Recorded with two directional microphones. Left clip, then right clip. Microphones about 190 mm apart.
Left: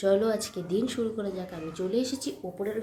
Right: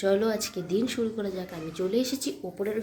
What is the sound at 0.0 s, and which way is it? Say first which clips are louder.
Speech: even; 10° right (ahead or behind).